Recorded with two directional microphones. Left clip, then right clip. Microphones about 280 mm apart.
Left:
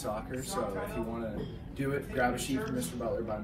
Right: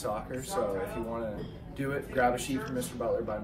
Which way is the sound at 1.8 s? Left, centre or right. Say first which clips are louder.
Right 2 dB; right.